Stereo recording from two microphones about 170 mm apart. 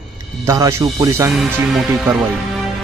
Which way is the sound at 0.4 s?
15° right (ahead or behind).